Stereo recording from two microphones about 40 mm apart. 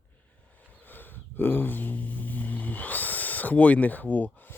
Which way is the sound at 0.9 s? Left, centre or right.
Left.